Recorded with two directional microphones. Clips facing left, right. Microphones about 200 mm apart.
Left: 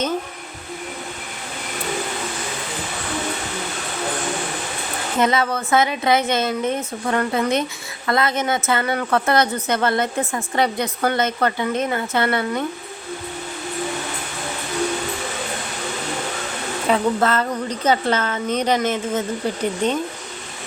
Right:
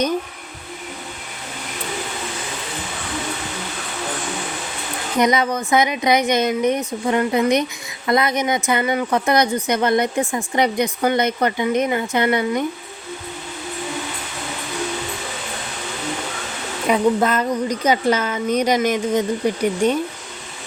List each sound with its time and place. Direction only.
5.1 s speech: 15° right (ahead or behind)
16.9 s speech: 15° right (ahead or behind)